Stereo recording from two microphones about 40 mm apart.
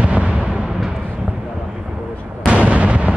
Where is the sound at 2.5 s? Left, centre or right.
Right.